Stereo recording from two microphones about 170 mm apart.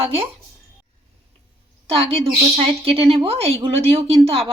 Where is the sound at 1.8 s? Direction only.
35° right (ahead or behind).